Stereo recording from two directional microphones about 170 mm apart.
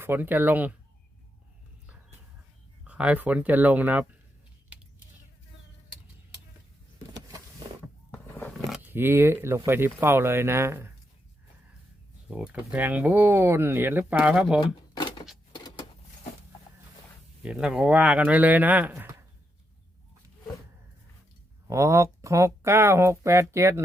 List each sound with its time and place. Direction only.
0.0 s speech: 10° right (ahead or behind)
2.8 s speech: 10° right (ahead or behind)
8.1 s a sound: 10° left (ahead or behind)
8.7 s speech: 10° right (ahead or behind)
12.3 s speech: 5° right (ahead or behind)
14.6 s a sound: 30° left (ahead or behind)
17.4 s speech: 5° right (ahead or behind)
21.7 s speech: 15° right (ahead or behind)